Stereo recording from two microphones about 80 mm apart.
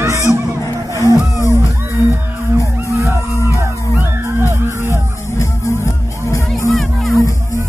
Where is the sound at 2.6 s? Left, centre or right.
Right.